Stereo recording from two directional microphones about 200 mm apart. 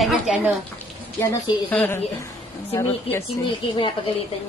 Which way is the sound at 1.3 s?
10° left (ahead or behind).